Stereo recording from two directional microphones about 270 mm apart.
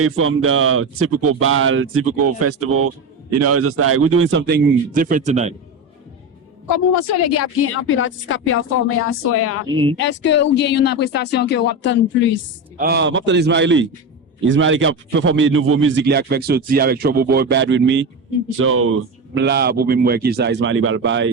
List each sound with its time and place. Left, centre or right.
0.0 s a man's voice: right
6.7 s speech: left
9.6 s speech: centre
10.0 s speech: left
12.7 s a man's voice: right